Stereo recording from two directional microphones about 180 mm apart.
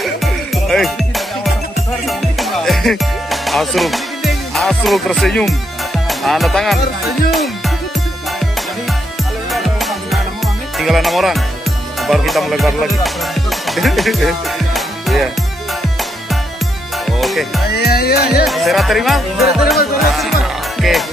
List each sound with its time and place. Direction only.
0.0 s music: centre (ahead or behind)
9.5 s music: centre (ahead or behind)
12.0 s speech: centre (ahead or behind)
17.0 s music: centre (ahead or behind)
17.7 s music: 60° left (ahead or behind)
18.4 s music: centre (ahead or behind)